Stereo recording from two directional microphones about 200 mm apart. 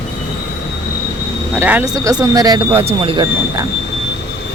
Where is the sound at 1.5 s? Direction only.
10° right (ahead or behind).